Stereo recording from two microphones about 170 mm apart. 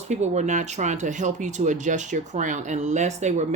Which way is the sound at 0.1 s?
45° right (ahead or behind).